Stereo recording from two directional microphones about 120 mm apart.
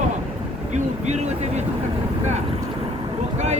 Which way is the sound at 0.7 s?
70° right (ahead or behind).